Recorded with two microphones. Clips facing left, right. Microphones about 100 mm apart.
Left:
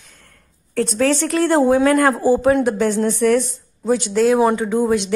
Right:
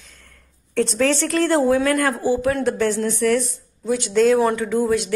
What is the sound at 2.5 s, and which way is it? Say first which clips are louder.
Speech: left 3 dB; 15° left (ahead or behind).